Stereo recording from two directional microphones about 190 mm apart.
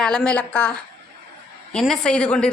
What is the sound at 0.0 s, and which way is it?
A woman's voice, 5° left (ahead or behind).